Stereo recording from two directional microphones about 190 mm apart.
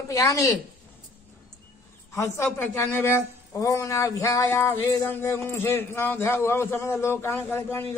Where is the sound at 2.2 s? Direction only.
15° left (ahead or behind).